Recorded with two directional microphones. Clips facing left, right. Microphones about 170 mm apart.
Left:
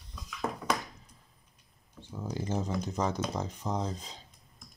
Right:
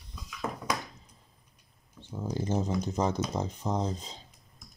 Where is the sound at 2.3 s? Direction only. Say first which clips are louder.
Right 3 dB; 25° right (ahead or behind).